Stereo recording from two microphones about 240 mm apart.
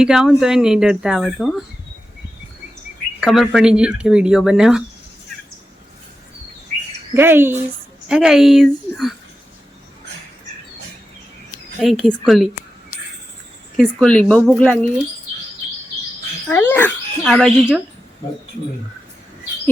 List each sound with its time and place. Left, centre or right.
0.0 s speech: centre
3.2 s speech: centre
7.1 s speech: centre
11.8 s speech: centre
13.7 s speech: centre
16.5 s speech: centre